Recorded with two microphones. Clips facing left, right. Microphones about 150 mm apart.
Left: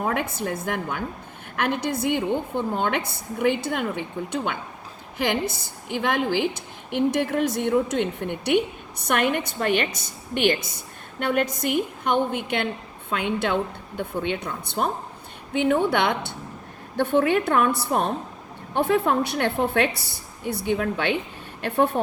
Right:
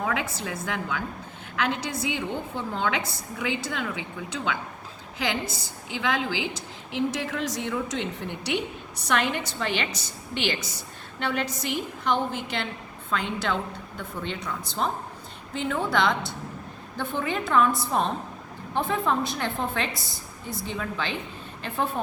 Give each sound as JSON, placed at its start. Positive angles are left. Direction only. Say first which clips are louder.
{"t": 0.0, "sound": "a woman's voice", "louder": "left 3 dB", "side_deg": 50}